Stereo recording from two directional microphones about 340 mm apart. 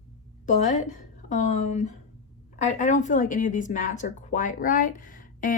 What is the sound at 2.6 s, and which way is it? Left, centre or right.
Speech, left.